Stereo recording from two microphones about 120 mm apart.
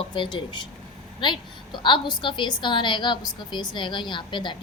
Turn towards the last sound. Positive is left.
turn(degrees=40)  # may be behind; listen again after turning